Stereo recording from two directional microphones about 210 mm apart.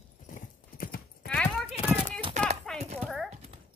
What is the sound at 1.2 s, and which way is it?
Clip-clop, 5° left (ahead or behind).